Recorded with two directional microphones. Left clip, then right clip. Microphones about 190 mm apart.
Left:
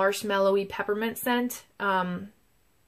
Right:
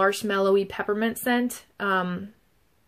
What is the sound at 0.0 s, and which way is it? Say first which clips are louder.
Speech: right 1 dB; 20° right (ahead or behind).